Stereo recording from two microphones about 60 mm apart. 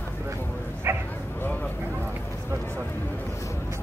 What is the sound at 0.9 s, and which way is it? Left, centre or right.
Bow-wow, right.